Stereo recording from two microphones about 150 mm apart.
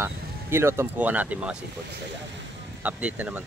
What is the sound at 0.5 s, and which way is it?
Speech, 15° right (ahead or behind).